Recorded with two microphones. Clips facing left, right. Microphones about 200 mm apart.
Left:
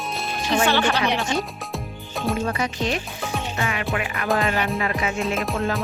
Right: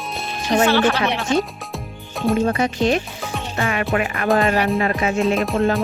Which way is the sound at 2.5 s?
45° right (ahead or behind).